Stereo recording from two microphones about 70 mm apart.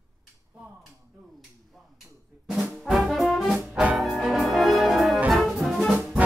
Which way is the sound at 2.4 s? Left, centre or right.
Centre.